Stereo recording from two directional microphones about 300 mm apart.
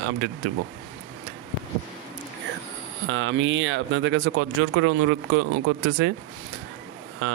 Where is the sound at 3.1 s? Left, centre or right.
Right.